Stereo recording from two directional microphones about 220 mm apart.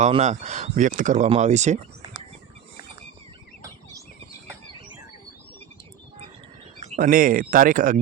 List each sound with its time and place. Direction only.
0.0 s speech: 30° right (ahead or behind)
6.7 s speech: 35° right (ahead or behind)